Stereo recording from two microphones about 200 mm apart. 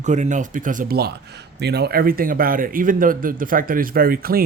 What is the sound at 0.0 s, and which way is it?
Speech, 35° right (ahead or behind).